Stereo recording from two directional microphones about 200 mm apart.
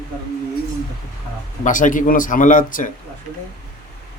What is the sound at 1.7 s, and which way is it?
A man's voice, 40° left (ahead or behind).